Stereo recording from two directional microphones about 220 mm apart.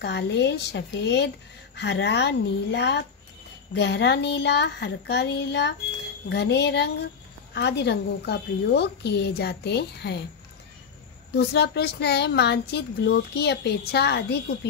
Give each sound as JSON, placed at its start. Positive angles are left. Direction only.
{"t": 0.0, "sound": "speech", "side_deg": 50}
{"t": 11.3, "sound": "speech", "side_deg": 50}